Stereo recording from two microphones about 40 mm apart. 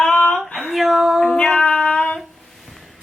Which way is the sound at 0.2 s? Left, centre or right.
Left.